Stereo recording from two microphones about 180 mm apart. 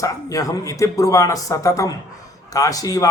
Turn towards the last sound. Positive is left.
turn(degrees=20)  # may be behind; listen again after turning